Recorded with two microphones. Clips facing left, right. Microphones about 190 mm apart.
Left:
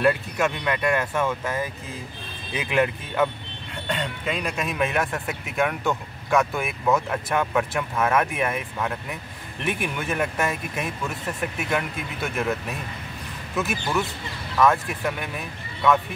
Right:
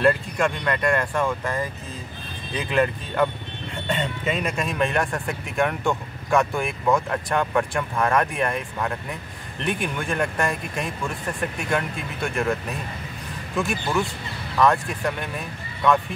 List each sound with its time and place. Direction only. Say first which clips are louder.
0.0 s speech: right 1 dB; 5° left (ahead or behind)